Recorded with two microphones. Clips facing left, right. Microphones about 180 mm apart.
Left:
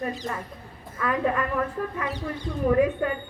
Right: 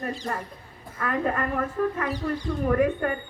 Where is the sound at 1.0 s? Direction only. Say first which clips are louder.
Left 1 dB; 55° right (ahead or behind).